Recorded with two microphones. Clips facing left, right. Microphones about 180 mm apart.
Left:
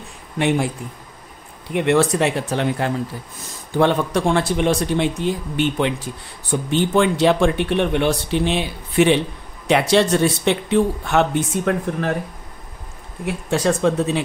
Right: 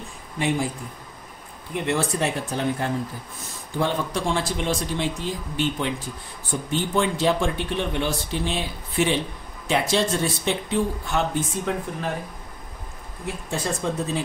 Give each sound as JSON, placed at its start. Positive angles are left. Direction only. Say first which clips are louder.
{"t": 0.4, "sound": "speech", "louder": "left 5 dB", "side_deg": 70}
{"t": 1.7, "sound": "speech", "louder": "left 8 dB", "side_deg": 75}
{"t": 13.2, "sound": "speech", "louder": "left 8 dB", "side_deg": 80}